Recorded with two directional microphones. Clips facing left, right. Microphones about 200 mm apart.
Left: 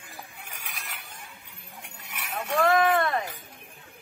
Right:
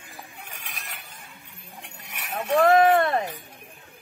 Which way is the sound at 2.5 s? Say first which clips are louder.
Right 5 dB; 35° right (ahead or behind).